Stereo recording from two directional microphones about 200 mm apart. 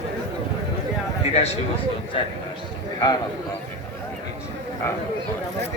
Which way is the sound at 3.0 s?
20° left (ahead or behind).